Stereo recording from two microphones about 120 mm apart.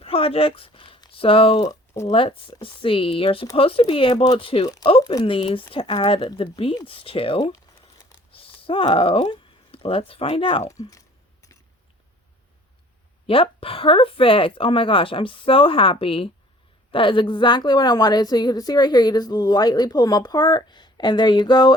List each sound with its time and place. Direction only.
0.0 s speech: 50° left (ahead or behind)
10.6 s speech: 30° left (ahead or behind)
13.2 s a woman's voice: 50° left (ahead or behind)